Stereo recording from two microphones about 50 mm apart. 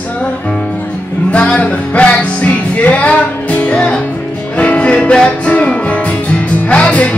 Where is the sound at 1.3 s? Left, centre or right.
Left.